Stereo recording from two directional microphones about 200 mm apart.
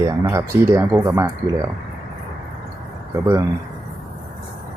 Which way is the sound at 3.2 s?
15° right (ahead or behind).